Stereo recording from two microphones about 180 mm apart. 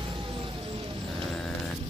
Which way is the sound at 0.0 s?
25° right (ahead or behind).